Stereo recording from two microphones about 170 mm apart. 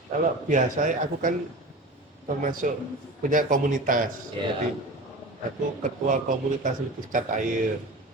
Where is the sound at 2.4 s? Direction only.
50° right (ahead or behind).